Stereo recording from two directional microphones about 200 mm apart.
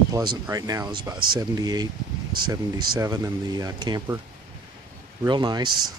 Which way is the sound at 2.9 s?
15° right (ahead or behind).